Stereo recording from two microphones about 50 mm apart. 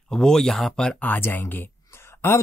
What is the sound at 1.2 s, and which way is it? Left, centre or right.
Speech, left.